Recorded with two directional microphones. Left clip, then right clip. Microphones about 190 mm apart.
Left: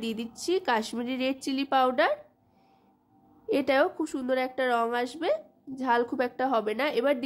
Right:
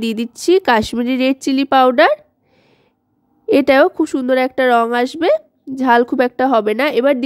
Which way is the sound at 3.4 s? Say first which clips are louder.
Right 13 dB; 45° right (ahead or behind).